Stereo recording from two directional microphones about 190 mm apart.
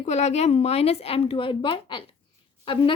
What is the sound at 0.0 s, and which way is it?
A woman's voice, 35° left (ahead or behind).